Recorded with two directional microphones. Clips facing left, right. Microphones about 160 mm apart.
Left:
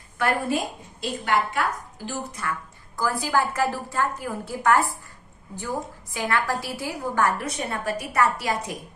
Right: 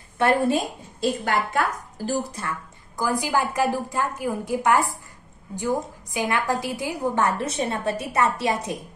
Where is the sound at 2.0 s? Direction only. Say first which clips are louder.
Right 4 dB; 30° right (ahead or behind).